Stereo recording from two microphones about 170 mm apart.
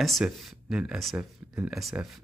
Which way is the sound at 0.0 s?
Centre (ahead or behind).